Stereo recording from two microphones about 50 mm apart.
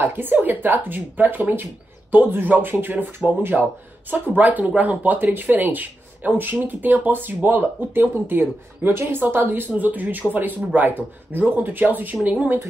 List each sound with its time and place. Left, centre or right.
0.0 s speech: right
9.7 s speech: right